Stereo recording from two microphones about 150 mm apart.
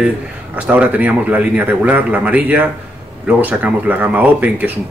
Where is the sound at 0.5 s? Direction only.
10° right (ahead or behind).